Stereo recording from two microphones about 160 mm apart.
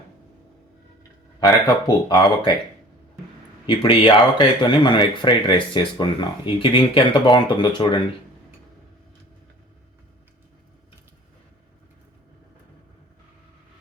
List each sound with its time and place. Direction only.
1.4 s speech: 25° left (ahead or behind)
3.7 s speech: 30° left (ahead or behind)